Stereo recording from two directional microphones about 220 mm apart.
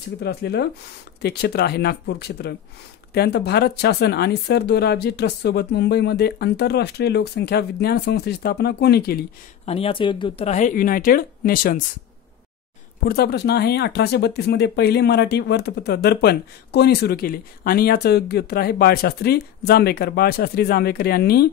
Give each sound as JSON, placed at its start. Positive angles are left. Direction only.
{"t": 0.2, "sound": "speech", "side_deg": 45}
{"t": 9.7, "sound": "speech", "side_deg": 25}
{"t": 13.0, "sound": "speech", "side_deg": 45}